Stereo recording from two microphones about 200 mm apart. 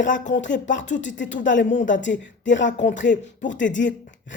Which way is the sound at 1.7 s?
35° left (ahead or behind).